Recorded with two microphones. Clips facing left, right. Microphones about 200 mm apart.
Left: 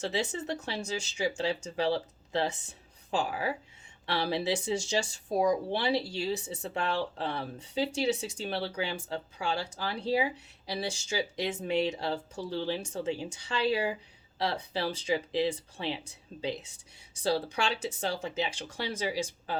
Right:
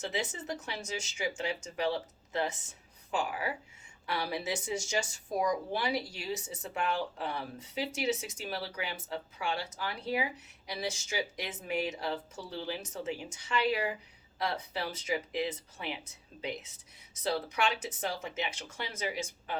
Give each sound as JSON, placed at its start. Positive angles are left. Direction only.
{"t": 0.0, "sound": "speech", "side_deg": 30}